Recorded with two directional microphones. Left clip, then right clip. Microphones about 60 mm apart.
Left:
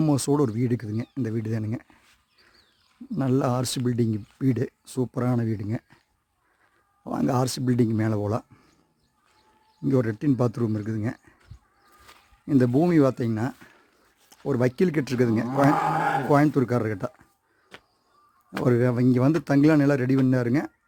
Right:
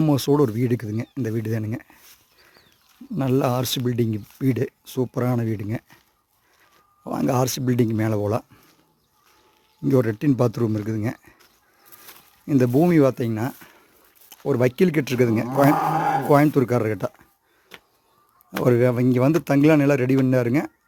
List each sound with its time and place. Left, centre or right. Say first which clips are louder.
0.0 s speech: right 4 dB; centre
0.6 s speech: right 3 dB; right
1.0 s speech: right 3 dB; centre
3.1 s speech: right 3 dB; centre
7.0 s speech: right 3 dB; centre
9.8 s speech: right 4 dB; centre
10.2 s speech: right 4 dB; centre
12.5 s speech: right 3 dB; centre
18.6 s speech: right 4 dB; centre